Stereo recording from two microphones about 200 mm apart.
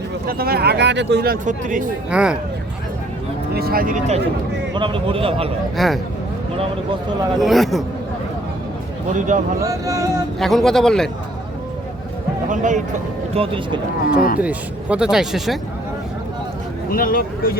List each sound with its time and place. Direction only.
0.3 s speech: 50° right (ahead or behind)
2.0 s speech: 5° right (ahead or behind)
3.5 s speech: 50° right (ahead or behind)
4.7 s a man's voice: 25° right (ahead or behind)
5.7 s speech: centre (ahead or behind)
7.3 s speech: centre (ahead or behind)
9.1 s speech: 40° right (ahead or behind)
9.6 s speech: 15° right (ahead or behind)
10.4 s speech: centre (ahead or behind)
12.5 s speech: 40° right (ahead or behind)
13.3 s a man's voice: 25° right (ahead or behind)
14.2 s speech: 45° left (ahead or behind)
14.4 s speech: 5° right (ahead or behind)
16.9 s speech: 45° left (ahead or behind)